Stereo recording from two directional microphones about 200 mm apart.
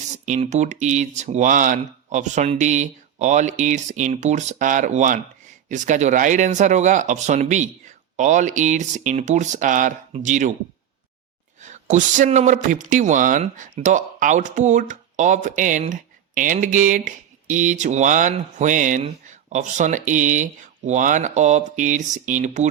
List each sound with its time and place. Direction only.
0.3 s a man's voice: 35° right (ahead or behind)
11.6 s a man's voice: 40° right (ahead or behind)